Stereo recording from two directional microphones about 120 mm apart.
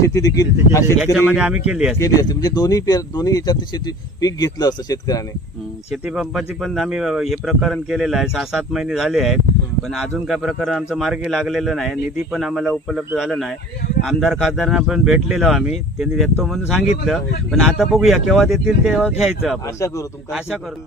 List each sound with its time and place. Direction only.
0.0 s speech: 25° left (ahead or behind)
1.3 s speech: 5° right (ahead or behind)
2.0 s speech: 30° left (ahead or behind)
6.1 s speech: centre (ahead or behind)